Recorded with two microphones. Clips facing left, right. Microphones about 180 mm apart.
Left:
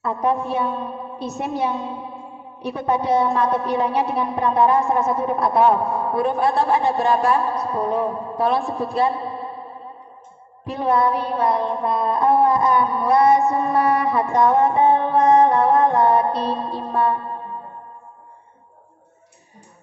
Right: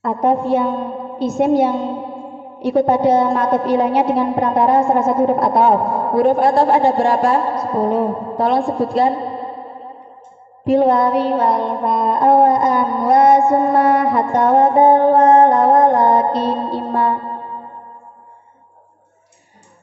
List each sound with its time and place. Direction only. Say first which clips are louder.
0.0 s a woman's voice: right 5 dB; 75° right (ahead or behind)
10.6 s child singing: right 7 dB; 90° right
13.5 s music: right 5 dB; 85° right; by 17.5 s 65° right (ahead or behind)